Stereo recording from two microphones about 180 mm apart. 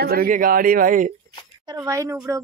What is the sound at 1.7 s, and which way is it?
Speech, 15° right (ahead or behind).